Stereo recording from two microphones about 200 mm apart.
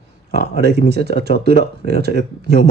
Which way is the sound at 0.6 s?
55° right (ahead or behind).